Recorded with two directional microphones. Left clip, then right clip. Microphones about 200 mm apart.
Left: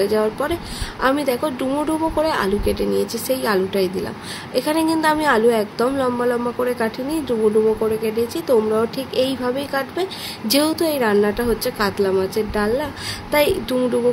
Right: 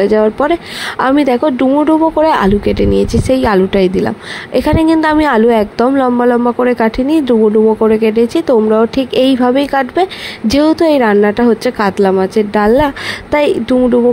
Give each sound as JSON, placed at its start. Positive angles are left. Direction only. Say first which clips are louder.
{"t": 0.0, "sound": "a woman's voice", "louder": "right 9 dB", "side_deg": -35}